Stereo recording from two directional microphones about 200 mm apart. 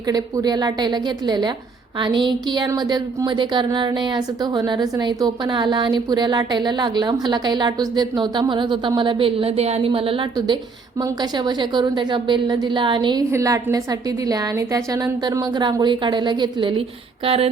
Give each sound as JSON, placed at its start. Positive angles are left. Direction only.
{"t": 0.1, "sound": "speech", "side_deg": -20}